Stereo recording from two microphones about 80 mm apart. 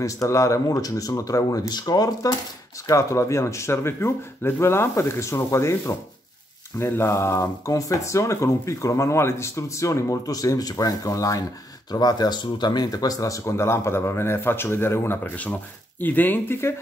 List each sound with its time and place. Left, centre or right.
0.0 s speech: left
2.9 s speech: left
11.9 s speech: left